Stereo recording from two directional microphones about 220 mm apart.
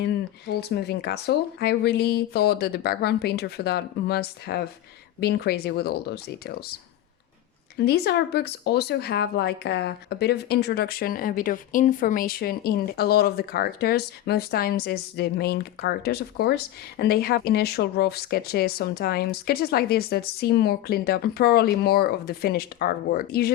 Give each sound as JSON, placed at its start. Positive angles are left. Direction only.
{"t": 0.0, "sound": "speech", "side_deg": 50}
{"t": 7.8, "sound": "speech", "side_deg": 50}